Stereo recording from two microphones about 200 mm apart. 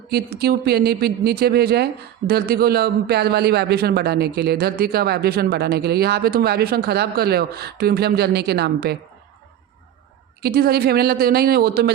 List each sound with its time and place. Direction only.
0.1 s speech: 55° right (ahead or behind)
10.4 s speech: 50° right (ahead or behind)